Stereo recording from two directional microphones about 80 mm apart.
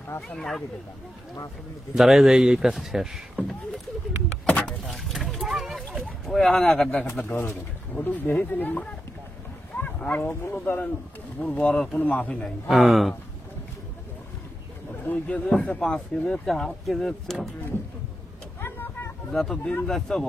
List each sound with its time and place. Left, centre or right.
0.4 s speech: centre
2.0 s speech: centre
4.5 s a sound: centre
6.2 s speech: centre
7.2 s speech: left
9.8 s a sound: centre
10.2 s speech: left
10.6 s speech: centre
12.4 s speech: centre
15.0 s speech: centre
15.9 s speech: centre
18.6 s vehicle: left
19.3 s speech: centre